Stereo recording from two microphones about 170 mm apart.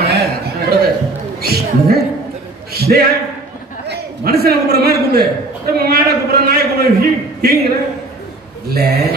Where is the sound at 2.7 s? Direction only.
65° right (ahead or behind).